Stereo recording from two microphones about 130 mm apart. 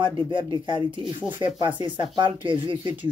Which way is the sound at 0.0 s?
40° right (ahead or behind).